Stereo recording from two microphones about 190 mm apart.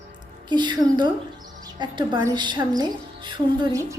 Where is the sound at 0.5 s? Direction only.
25° right (ahead or behind).